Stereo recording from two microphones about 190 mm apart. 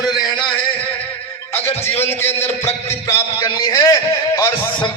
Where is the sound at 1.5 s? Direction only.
10° left (ahead or behind).